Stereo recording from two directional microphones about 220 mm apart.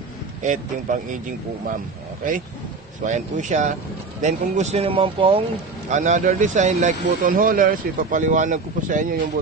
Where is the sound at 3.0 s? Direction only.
35° right (ahead or behind).